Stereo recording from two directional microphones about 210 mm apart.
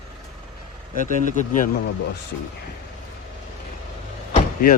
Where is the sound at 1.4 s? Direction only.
40° left (ahead or behind).